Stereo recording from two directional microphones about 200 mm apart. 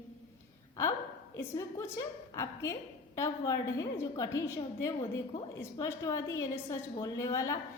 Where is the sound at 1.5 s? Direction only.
15° left (ahead or behind).